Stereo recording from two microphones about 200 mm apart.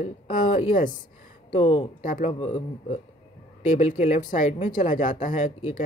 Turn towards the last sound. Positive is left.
turn(degrees=40)  # may be behind; listen again after turning